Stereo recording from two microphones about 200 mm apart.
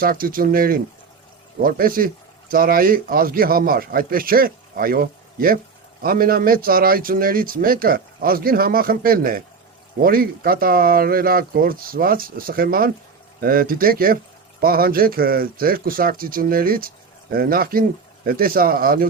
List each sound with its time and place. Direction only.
0.0 s speech: 45° right (ahead or behind)